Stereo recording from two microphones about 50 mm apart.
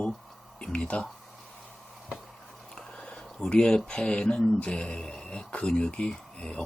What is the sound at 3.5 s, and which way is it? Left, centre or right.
Speech, centre.